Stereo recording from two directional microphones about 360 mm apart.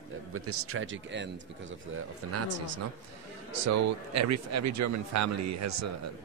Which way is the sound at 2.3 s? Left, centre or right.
Right.